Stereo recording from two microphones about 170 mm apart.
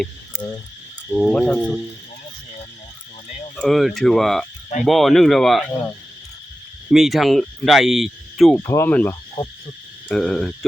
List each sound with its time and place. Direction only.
1.1 s speech: 5° left (ahead or behind)
3.6 s speech: centre (ahead or behind)
6.9 s speech: centre (ahead or behind)
8.6 s speech: 15° left (ahead or behind)
9.4 s cricket: 30° left (ahead or behind)
10.1 s speech: 5° left (ahead or behind)